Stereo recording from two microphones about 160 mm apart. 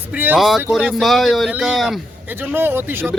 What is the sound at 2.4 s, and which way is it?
Speech, 15° right (ahead or behind).